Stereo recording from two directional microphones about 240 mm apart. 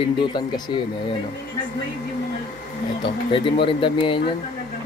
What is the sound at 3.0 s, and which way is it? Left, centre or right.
A man's voice, left.